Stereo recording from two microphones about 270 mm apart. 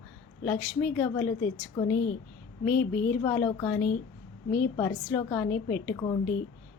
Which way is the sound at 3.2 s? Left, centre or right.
Centre.